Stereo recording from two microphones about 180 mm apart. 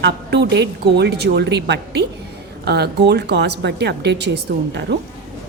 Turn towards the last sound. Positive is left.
turn(degrees=-70)  # may be behind; listen again after turning